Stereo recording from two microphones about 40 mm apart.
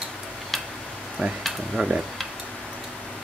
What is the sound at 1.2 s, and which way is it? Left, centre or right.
Speech, centre.